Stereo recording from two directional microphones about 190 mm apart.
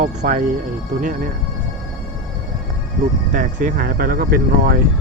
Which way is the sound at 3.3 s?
45° right (ahead or behind).